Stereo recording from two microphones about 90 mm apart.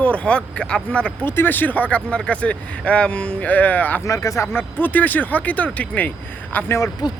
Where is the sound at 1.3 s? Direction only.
25° left (ahead or behind).